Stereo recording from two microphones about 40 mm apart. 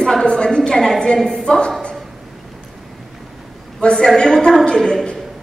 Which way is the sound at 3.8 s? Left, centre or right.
Left.